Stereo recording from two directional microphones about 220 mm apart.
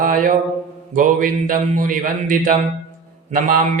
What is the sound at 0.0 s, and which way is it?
Mantra, 40° right (ahead or behind).